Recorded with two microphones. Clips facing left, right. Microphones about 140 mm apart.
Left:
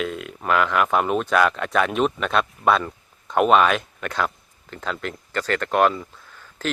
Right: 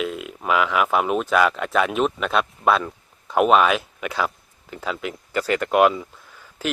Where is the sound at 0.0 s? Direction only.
5° right (ahead or behind).